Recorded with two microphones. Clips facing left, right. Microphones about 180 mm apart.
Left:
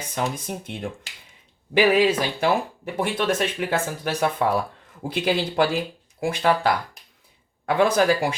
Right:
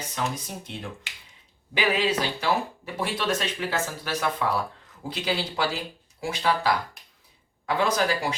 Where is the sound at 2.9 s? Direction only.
50° left (ahead or behind).